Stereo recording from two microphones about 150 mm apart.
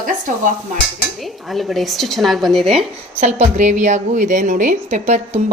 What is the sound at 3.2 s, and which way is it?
A woman's voice, 55° right (ahead or behind).